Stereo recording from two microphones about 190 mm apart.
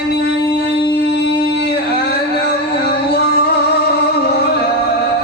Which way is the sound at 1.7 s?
55° left (ahead or behind).